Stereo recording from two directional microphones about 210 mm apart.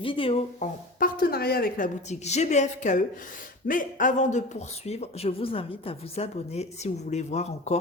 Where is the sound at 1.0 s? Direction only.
45° left (ahead or behind).